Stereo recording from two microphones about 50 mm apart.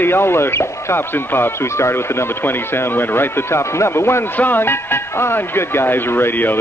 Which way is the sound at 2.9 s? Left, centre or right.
Left.